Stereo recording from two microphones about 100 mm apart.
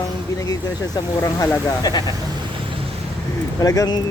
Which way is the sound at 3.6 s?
35° left (ahead or behind).